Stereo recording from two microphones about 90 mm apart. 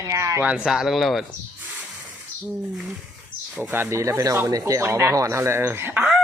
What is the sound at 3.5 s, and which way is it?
Speech, 20° right (ahead or behind).